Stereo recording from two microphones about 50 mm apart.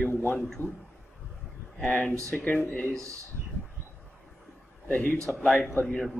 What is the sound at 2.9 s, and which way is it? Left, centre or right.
Speech, right.